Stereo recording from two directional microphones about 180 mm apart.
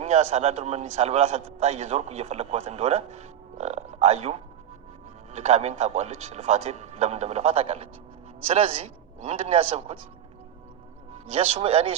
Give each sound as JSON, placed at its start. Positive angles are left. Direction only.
{"t": 0.0, "sound": "a man's voice", "side_deg": -40}
{"t": 11.3, "sound": "a man's voice", "side_deg": -30}